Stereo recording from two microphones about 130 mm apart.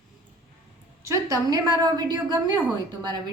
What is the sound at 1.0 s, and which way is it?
A woman's voice, 25° right (ahead or behind).